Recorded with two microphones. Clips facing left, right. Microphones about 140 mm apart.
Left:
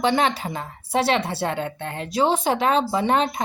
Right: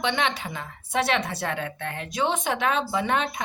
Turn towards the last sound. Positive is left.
turn(degrees=35)  # may be behind; listen again after turning